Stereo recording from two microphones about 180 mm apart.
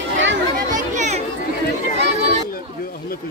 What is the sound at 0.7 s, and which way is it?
Children playing, 40° right (ahead or behind).